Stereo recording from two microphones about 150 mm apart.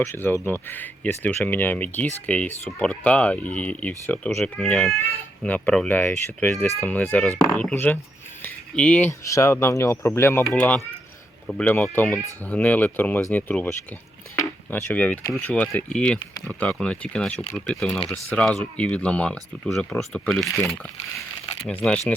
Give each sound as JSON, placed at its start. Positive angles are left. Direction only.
{"t": 0.0, "sound": "speech", "side_deg": 15}
{"t": 10.5, "sound": "speech", "side_deg": 5}